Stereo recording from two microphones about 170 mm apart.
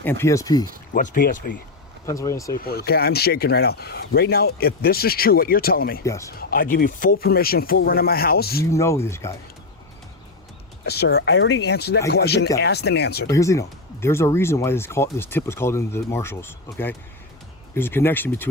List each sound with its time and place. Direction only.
0.0 s speech: 15° left (ahead or behind)
0.9 s speech: 55° left (ahead or behind)
2.0 s speech: 20° left (ahead or behind)
2.6 s speech: 65° left (ahead or behind)
6.1 s speech: 20° left (ahead or behind)
6.5 s speech: 55° left (ahead or behind)
8.7 s speech: 15° left (ahead or behind)
10.8 s speech: 70° left (ahead or behind)
13.3 s speech: 20° left (ahead or behind)